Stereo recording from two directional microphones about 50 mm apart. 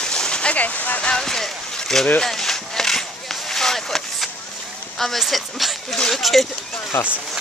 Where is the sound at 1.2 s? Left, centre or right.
Centre.